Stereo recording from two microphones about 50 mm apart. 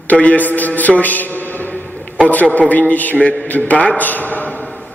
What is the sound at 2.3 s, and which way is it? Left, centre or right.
A man's voice, left.